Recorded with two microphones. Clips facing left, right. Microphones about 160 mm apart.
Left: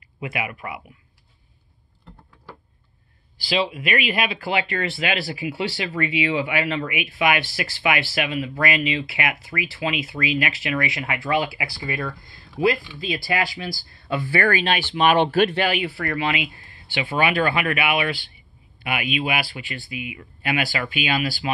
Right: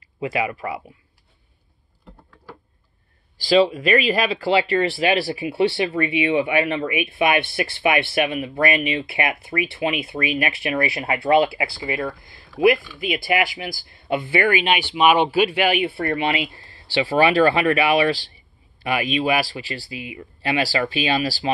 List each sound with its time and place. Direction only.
0.2 s speech: 30° right (ahead or behind)
3.4 s speech: 40° right (ahead or behind)